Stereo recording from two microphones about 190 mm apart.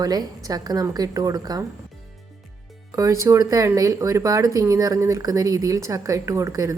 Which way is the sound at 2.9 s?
15° right (ahead or behind).